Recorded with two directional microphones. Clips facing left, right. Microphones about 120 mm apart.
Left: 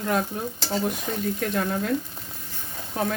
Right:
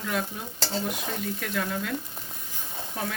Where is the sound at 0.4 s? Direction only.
45° left (ahead or behind).